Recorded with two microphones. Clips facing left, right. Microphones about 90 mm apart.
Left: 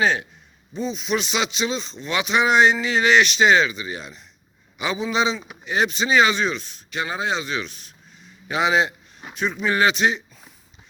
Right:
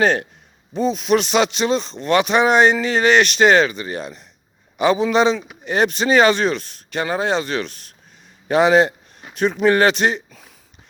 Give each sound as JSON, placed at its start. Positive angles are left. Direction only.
{"t": 0.0, "sound": "speech", "side_deg": -55}